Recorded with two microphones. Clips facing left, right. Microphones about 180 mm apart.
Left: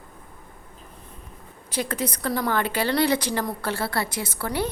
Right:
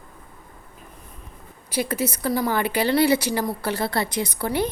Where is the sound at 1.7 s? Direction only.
10° right (ahead or behind).